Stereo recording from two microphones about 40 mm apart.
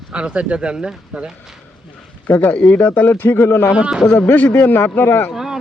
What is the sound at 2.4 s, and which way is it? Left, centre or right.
Speech, left.